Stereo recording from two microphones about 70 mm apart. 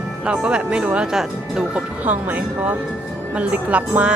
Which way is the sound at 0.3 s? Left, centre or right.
Centre.